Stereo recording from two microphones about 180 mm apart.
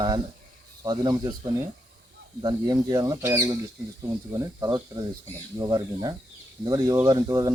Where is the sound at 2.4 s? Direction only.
20° right (ahead or behind).